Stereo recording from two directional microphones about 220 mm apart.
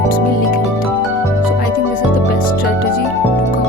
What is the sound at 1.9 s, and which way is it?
Music, 40° left (ahead or behind).